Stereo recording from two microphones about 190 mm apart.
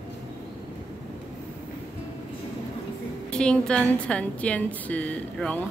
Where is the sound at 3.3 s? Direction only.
5° left (ahead or behind).